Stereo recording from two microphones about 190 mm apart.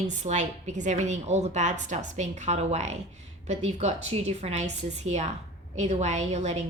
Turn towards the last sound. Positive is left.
turn(degrees=-35)  # may be behind; listen again after turning